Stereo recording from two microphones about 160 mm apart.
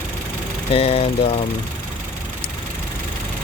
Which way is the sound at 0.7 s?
40° left (ahead or behind).